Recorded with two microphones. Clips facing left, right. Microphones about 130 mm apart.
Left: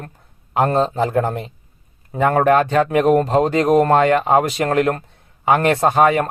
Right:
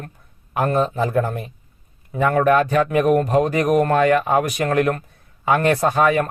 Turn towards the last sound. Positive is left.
turn(degrees=20)  # may be behind; listen again after turning